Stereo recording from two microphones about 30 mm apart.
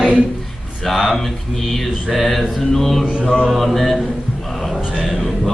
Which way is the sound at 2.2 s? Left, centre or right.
Centre.